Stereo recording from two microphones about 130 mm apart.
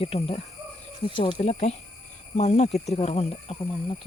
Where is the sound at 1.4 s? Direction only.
60° left (ahead or behind).